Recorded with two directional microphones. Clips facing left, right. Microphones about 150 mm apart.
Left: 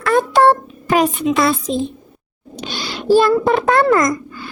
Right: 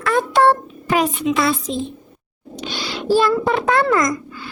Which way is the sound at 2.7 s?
45° left (ahead or behind).